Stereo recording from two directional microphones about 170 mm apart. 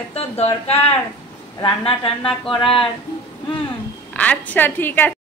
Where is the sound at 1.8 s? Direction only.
35° left (ahead or behind).